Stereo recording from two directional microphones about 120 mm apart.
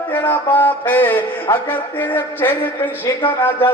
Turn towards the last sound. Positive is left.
turn(degrees=20)  # may be behind; listen again after turning